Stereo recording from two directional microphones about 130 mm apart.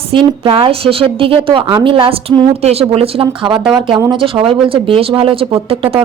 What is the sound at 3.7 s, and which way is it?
Speech, 30° right (ahead or behind).